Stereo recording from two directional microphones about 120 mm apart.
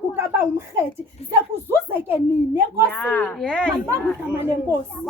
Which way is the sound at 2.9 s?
15° left (ahead or behind).